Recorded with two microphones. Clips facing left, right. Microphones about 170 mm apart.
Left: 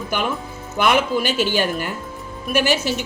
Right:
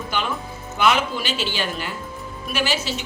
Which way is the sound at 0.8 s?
50° left (ahead or behind).